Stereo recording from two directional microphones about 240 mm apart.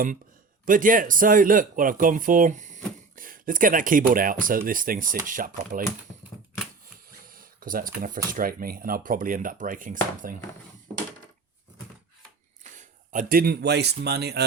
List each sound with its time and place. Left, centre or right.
0.6 s speech: right
7.3 s speech: right
12.7 s speech: right